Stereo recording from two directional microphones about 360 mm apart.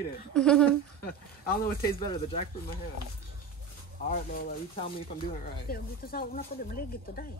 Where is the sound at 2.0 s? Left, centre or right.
Centre.